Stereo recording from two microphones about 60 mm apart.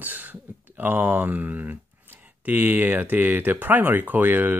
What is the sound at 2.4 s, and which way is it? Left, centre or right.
Speech, right.